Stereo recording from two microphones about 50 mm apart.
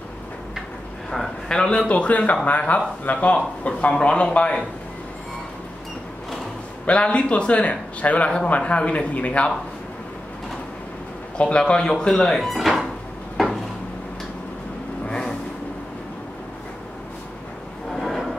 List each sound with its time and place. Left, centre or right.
1.5 s speech: centre
1.9 s a man's voice: left
6.9 s a man's voice: left
11.3 s speech: left
12.5 s dishes: centre
13.4 s a sound: centre
17.9 s a sound: centre